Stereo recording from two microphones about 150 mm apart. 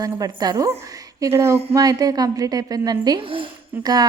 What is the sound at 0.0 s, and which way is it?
Speech, 25° right (ahead or behind).